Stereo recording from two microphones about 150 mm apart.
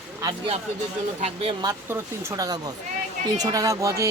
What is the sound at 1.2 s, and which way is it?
Speech, 40° right (ahead or behind).